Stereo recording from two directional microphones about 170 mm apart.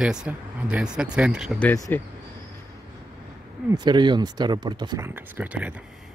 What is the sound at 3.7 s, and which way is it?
Speech, 25° right (ahead or behind).